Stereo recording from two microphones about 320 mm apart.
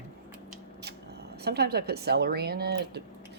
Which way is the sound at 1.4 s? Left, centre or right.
Right.